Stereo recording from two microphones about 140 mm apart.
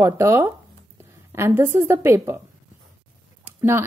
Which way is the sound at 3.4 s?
15° right (ahead or behind).